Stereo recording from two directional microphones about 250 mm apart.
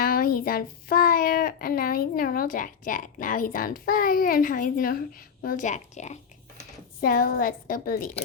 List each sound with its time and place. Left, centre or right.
0.0 s a child's voice: left